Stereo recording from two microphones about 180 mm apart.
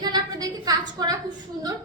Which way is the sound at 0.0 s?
20° right (ahead or behind).